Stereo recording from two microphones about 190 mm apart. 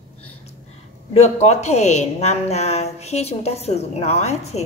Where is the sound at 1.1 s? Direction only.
35° left (ahead or behind).